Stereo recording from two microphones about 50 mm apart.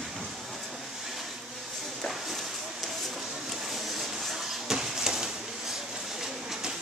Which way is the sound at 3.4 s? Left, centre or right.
Centre.